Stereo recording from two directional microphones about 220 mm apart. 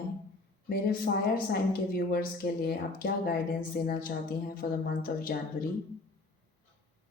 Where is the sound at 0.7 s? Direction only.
40° left (ahead or behind).